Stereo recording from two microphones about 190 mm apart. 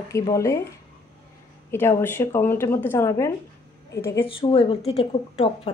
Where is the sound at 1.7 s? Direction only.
15° left (ahead or behind).